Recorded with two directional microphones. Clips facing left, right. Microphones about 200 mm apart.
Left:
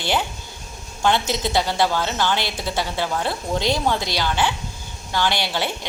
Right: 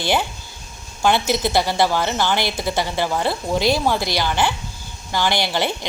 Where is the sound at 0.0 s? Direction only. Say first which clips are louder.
Right 2 dB; 10° right (ahead or behind).